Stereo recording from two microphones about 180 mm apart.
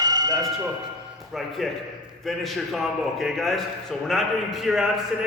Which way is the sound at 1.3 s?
Centre (ahead or behind).